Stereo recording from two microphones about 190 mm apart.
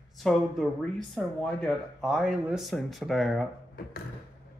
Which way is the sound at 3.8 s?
50° left (ahead or behind).